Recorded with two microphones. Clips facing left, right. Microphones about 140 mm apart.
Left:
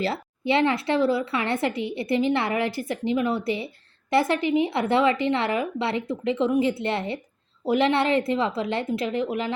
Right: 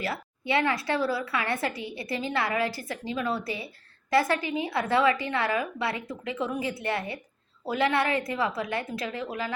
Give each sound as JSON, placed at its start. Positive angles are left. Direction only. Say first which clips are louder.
{"t": 0.0, "sound": "speech", "louder": "left 6 dB", "side_deg": 25}